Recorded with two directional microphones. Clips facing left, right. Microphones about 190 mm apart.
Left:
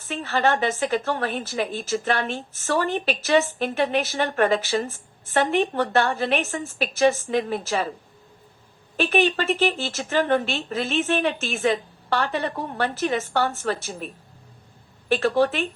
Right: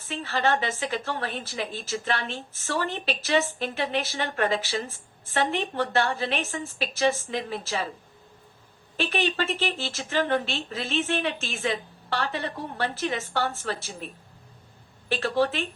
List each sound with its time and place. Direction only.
0.1 s a woman's voice: 55° left (ahead or behind)
9.0 s a woman's voice: 50° left (ahead or behind)
15.1 s a woman's voice: 50° left (ahead or behind)